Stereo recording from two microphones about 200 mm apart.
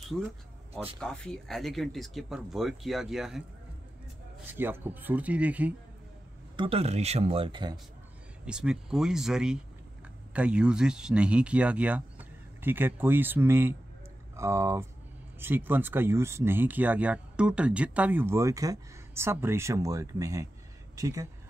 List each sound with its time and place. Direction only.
0.9 s speech: 5° left (ahead or behind)
4.6 s speech: 10° right (ahead or behind)
6.5 s speech: 25° right (ahead or behind)
8.5 s speech: 5° right (ahead or behind)